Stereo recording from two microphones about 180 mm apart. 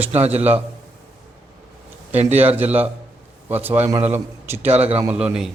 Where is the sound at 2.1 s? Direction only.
10° right (ahead or behind).